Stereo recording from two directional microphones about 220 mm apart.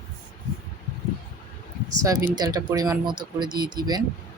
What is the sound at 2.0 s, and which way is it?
Speech, 15° right (ahead or behind).